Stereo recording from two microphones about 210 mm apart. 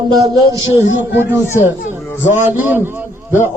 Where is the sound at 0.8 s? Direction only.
60° left (ahead or behind).